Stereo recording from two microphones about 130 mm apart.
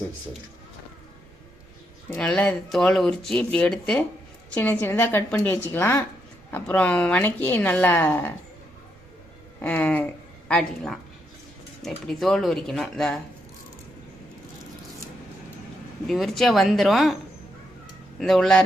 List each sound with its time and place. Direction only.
2.1 s a woman's voice: 5° left (ahead or behind)
9.6 s a woman's voice: 10° left (ahead or behind)
16.0 s speech: centre (ahead or behind)
18.2 s speech: 5° left (ahead or behind)